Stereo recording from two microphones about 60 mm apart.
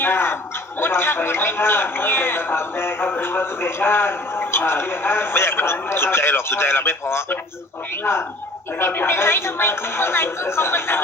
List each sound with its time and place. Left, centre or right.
0.0 s a man's voice: left
8.8 s a woman's voice: left